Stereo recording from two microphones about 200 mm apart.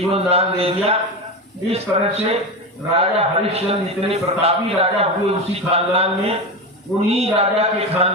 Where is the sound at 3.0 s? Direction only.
30° right (ahead or behind).